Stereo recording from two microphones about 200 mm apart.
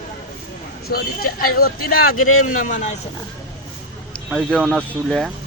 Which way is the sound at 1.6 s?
50° left (ahead or behind).